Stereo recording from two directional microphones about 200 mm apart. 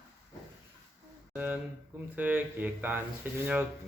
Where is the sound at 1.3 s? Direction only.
10° right (ahead or behind).